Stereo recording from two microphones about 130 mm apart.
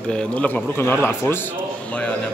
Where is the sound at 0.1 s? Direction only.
10° left (ahead or behind).